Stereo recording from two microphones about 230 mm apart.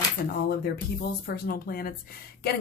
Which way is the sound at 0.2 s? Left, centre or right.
Left.